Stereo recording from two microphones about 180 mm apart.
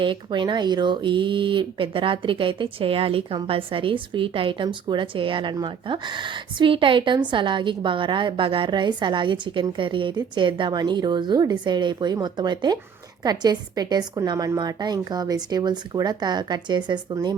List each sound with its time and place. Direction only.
0.0 s speech: 25° right (ahead or behind)